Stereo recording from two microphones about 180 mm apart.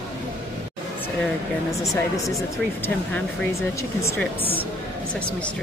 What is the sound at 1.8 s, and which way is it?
Speech, 20° left (ahead or behind).